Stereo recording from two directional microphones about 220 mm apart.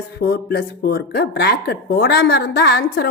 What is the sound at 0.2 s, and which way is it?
Speech, 45° left (ahead or behind).